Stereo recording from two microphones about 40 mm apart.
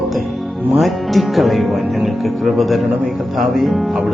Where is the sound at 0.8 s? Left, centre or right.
Centre.